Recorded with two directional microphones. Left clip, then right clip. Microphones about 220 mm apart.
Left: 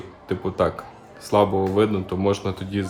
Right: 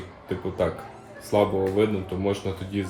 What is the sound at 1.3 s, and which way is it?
Speech, 20° left (ahead or behind).